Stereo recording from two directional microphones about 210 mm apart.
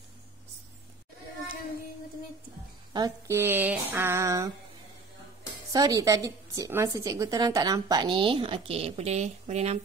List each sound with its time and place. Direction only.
2.9 s speech: 15° right (ahead or behind)
5.7 s a woman's voice: 15° right (ahead or behind); by 9.8 s 30° right (ahead or behind)